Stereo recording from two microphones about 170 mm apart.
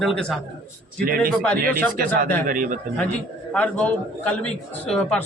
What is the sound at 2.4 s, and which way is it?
Speech, 55° right (ahead or behind).